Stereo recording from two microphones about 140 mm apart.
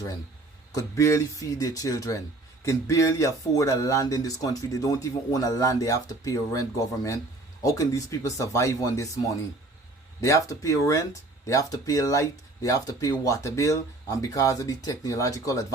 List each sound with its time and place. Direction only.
0.7 s speech: 25° left (ahead or behind)
10.2 s speech: 20° left (ahead or behind)